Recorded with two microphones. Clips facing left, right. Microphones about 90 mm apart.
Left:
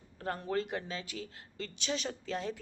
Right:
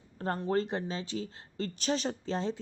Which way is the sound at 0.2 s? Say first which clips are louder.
Right 4 dB; 30° right (ahead or behind).